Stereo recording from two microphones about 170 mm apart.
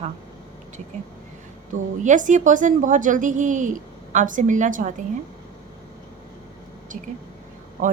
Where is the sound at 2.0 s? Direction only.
50° right (ahead or behind).